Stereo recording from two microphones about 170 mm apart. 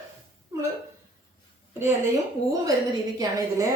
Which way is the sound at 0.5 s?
15° right (ahead or behind).